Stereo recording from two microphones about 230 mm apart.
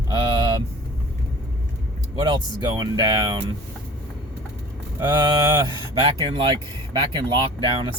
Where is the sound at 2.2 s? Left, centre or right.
Centre.